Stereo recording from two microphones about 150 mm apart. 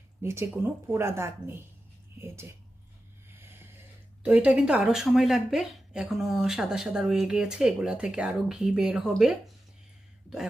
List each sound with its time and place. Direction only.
0.2 s speech: 15° right (ahead or behind)
3.3 s a sound: 15° right (ahead or behind)
4.2 s speech: 10° right (ahead or behind)